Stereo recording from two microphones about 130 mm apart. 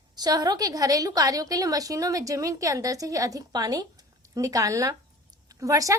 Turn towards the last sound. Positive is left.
turn(degrees=-25)  # may be behind; listen again after turning